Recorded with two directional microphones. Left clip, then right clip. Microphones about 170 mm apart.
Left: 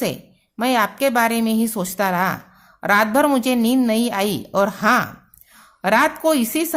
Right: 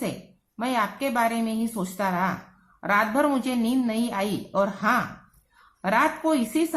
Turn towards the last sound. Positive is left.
turn(degrees=65)  # may be behind; listen again after turning